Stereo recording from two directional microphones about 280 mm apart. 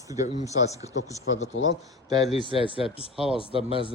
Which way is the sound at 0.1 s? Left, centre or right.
Centre.